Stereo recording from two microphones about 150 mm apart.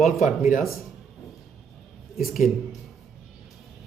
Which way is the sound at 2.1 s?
Centre (ahead or behind).